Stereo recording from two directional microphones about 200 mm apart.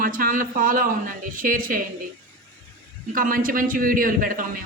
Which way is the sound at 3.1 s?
45° right (ahead or behind).